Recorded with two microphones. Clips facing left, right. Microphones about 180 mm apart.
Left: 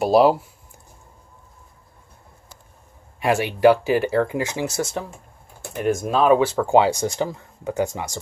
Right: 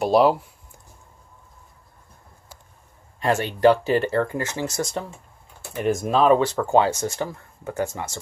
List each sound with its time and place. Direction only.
0.0 s speech: 5° left (ahead or behind)
3.2 s speech: 10° left (ahead or behind)